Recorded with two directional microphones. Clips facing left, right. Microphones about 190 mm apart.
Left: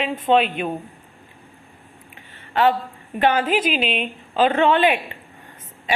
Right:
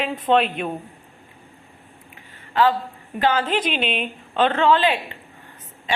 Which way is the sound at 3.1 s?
20° left (ahead or behind).